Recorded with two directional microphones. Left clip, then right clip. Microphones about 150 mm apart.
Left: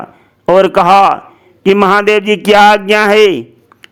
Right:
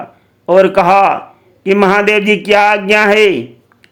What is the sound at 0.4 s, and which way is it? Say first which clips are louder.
A man's voice: left 1 dB; 35° left (ahead or behind).